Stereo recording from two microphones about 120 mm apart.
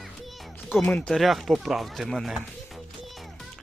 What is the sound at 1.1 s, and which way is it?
Speech, centre (ahead or behind).